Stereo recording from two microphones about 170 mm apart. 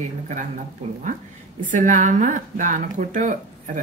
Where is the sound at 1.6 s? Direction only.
50° right (ahead or behind).